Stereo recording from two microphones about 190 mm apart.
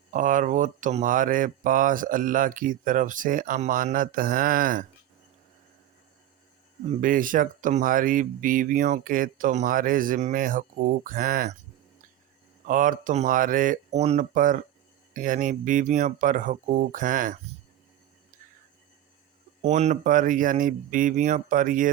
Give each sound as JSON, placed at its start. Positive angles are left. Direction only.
{"t": 0.1, "sound": "speech", "side_deg": -45}
{"t": 6.8, "sound": "speech", "side_deg": -40}
{"t": 12.6, "sound": "speech", "side_deg": -45}
{"t": 19.6, "sound": "speech", "side_deg": -35}